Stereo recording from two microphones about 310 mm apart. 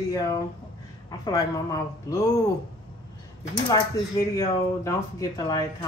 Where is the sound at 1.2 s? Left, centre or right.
Centre.